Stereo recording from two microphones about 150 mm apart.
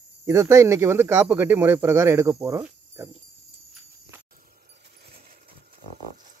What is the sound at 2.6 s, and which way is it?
Cricket, 20° right (ahead or behind).